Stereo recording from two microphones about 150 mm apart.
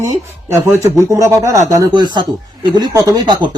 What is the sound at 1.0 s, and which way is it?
Speech, 20° right (ahead or behind).